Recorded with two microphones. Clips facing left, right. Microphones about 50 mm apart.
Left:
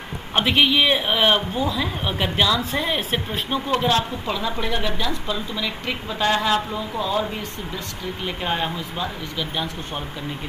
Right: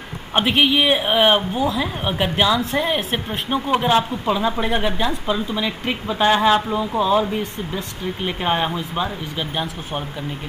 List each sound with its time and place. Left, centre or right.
0.3 s a man's voice: centre
7.0 s a man's voice: centre
8.3 s speech: right